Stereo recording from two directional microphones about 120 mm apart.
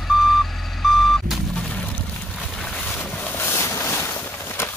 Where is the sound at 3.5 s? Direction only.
25° left (ahead or behind).